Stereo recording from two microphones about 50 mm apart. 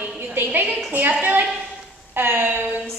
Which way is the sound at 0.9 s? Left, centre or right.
Right.